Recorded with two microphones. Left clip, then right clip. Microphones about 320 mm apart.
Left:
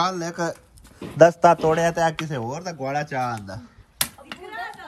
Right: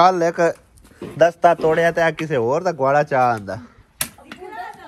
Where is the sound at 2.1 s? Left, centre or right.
Centre.